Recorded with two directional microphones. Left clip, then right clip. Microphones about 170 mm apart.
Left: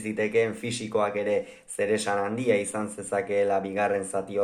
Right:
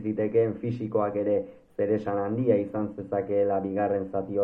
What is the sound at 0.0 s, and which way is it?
Speech, 20° left (ahead or behind).